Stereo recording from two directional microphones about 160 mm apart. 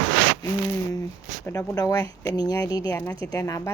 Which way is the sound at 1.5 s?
20° left (ahead or behind).